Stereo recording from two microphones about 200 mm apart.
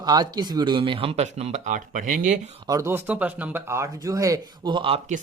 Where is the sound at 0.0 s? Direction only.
20° right (ahead or behind); by 2.4 s 40° right (ahead or behind).